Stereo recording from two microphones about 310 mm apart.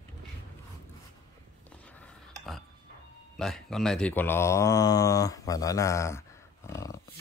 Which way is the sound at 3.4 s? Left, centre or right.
Centre.